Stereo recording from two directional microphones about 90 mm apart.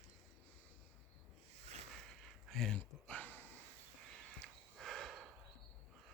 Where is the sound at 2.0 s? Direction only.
Centre (ahead or behind); by 3.5 s 20° left (ahead or behind).